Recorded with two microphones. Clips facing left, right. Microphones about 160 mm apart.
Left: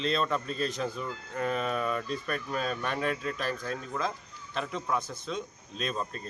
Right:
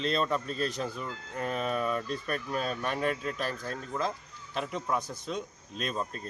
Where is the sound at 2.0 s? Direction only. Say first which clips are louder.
Even; 40° right (ahead or behind).